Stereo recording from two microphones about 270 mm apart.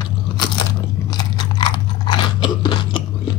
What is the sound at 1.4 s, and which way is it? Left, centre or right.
Crunch, centre.